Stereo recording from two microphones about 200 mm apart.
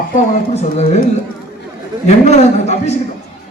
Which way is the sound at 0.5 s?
35° left (ahead or behind).